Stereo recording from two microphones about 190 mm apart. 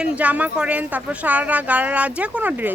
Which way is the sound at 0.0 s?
5° right (ahead or behind).